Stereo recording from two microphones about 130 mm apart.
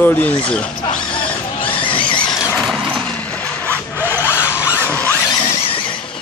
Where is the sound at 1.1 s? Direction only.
40° left (ahead or behind).